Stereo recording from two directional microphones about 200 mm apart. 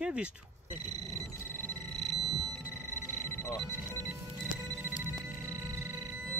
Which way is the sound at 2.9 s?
10° left (ahead or behind).